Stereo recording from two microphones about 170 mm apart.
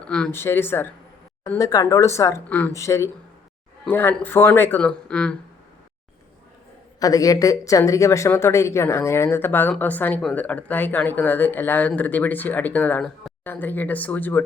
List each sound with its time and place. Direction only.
0.0 s speech: 5° left (ahead or behind)
7.0 s speech: 20° left (ahead or behind)